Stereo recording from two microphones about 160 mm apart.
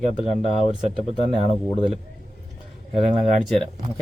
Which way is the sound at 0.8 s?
45° right (ahead or behind).